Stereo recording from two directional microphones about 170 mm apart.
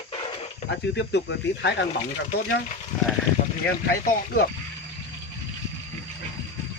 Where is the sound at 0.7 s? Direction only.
90° left.